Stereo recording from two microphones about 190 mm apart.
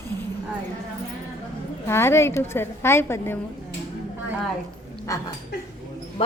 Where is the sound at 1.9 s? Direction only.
15° left (ahead or behind).